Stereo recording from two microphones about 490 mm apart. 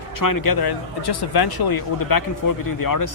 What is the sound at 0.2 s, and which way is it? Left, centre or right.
Speech, left.